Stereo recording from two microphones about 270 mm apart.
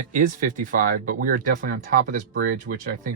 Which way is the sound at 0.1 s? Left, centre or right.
Right.